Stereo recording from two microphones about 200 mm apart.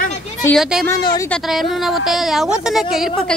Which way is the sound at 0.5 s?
5° right (ahead or behind).